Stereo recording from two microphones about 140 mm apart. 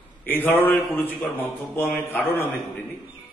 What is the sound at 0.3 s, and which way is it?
A man's voice, 15° left (ahead or behind).